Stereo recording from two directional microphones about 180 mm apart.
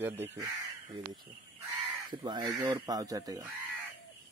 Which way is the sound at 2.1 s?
25° right (ahead or behind).